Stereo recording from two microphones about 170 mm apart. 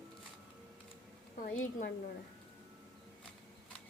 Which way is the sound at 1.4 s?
55° left (ahead or behind).